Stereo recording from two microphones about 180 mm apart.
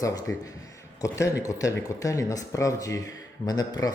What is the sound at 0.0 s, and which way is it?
A man's voice, 20° left (ahead or behind).